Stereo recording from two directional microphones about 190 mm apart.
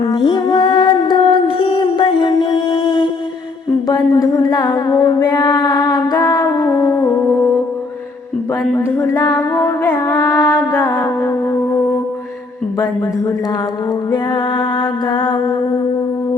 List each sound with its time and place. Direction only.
0.1 s music: 25° left (ahead or behind)
3.8 s a sound: 20° left (ahead or behind)
8.7 s music: 15° left (ahead or behind)
14.8 s music: 25° left (ahead or behind)